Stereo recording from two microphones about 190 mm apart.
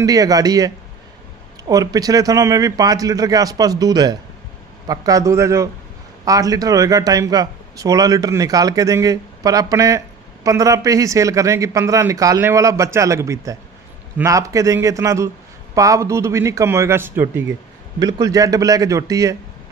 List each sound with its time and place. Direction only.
0.0 s a man's voice: 20° right (ahead or behind)